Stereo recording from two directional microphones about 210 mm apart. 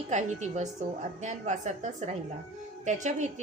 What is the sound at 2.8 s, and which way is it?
Speech, 35° right (ahead or behind).